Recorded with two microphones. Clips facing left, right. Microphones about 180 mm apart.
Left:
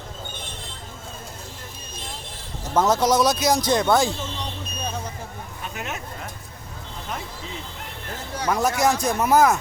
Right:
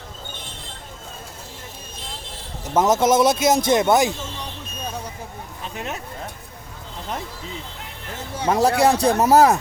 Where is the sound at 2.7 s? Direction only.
20° right (ahead or behind).